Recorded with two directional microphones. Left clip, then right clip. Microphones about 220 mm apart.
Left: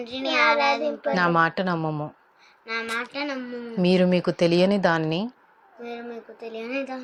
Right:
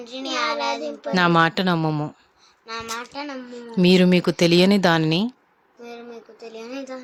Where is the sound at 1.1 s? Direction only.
30° right (ahead or behind).